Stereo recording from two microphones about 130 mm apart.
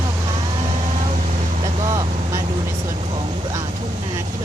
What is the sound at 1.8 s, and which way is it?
Vehicle, 30° right (ahead or behind).